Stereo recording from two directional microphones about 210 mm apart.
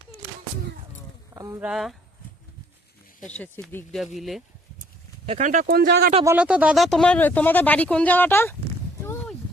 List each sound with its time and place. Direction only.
1.3 s speech: 15° right (ahead or behind)
1.7 s speech: centre (ahead or behind)
3.2 s speech: 5° left (ahead or behind)
5.3 s speech: 35° right (ahead or behind)
6.2 s speech: 5° right (ahead or behind); by 8.5 s 10° left (ahead or behind)